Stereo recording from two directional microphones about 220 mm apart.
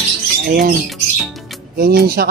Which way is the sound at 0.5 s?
40° right (ahead or behind).